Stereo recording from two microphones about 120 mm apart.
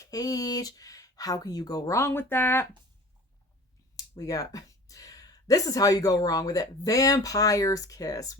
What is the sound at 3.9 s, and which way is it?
Speech, 30° left (ahead or behind).